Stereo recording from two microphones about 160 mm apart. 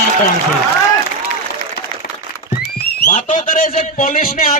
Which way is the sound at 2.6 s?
80° left.